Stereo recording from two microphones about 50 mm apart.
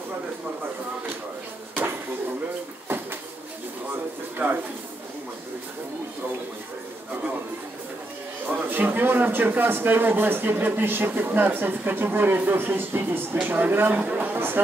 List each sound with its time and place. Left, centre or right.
4.4 s speech: right
8.5 s a man's voice: right
14.0 s a man's voice: right